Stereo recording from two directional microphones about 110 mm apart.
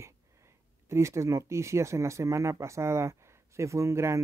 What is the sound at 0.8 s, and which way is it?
Speech, 25° right (ahead or behind).